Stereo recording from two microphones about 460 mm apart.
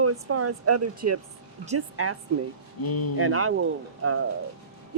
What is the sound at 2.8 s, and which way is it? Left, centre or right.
Speech, left.